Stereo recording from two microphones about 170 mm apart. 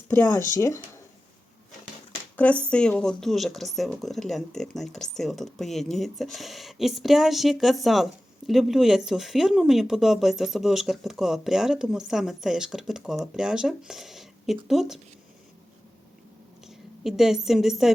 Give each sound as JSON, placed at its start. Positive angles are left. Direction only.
{"t": 0.1, "sound": "speech", "side_deg": 10}
{"t": 2.3, "sound": "speech", "side_deg": 10}
{"t": 17.0, "sound": "speech", "side_deg": 0}